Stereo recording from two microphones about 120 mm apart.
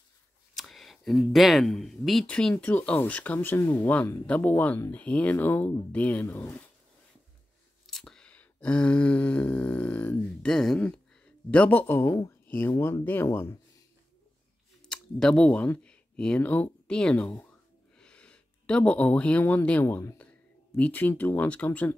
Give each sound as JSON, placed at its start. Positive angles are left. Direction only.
{"t": 0.6, "sound": "speech", "side_deg": 0}
{"t": 7.8, "sound": "a sound", "side_deg": 5}
{"t": 11.8, "sound": "speech", "side_deg": 20}
{"t": 14.9, "sound": "speech", "side_deg": 5}